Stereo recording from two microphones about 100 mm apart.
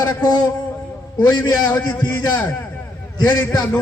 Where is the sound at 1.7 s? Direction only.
15° left (ahead or behind).